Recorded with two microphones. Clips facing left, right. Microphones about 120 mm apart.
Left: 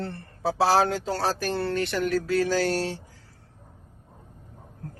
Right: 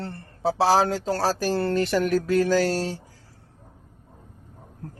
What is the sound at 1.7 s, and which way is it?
Music, 40° right (ahead or behind).